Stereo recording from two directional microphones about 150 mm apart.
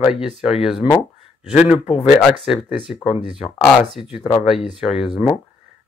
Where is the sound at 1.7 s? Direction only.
45° left (ahead or behind).